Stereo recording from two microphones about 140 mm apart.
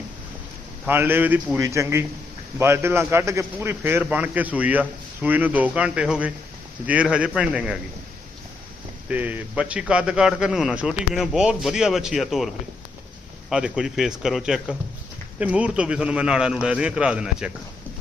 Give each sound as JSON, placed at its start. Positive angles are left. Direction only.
{"t": 0.9, "sound": "a man's voice", "side_deg": -15}
{"t": 9.0, "sound": "a man's voice", "side_deg": -10}
{"t": 13.5, "sound": "a man's voice", "side_deg": -5}